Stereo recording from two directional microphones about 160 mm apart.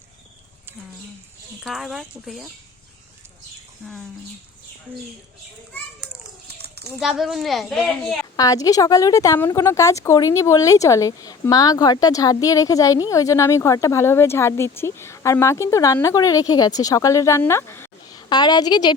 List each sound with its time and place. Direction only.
1.6 s a child's voice: centre (ahead or behind)
3.8 s a child's voice: centre (ahead or behind)
6.5 s a sound: 90° right
6.8 s a child's voice: centre (ahead or behind)
8.4 s a woman's voice: 20° left (ahead or behind)
18.1 s a woman's voice: 25° left (ahead or behind)